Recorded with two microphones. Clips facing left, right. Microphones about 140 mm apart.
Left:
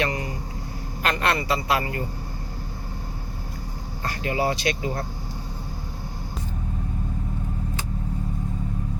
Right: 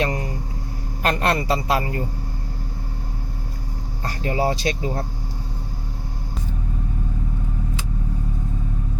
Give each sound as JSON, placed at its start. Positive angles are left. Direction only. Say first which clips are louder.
{"t": 0.0, "sound": "vehicle", "louder": "right 2 dB", "side_deg": -40}
{"t": 1.0, "sound": "speech", "louder": "right 3 dB", "side_deg": -40}
{"t": 4.0, "sound": "speech", "louder": "right 2 dB", "side_deg": -35}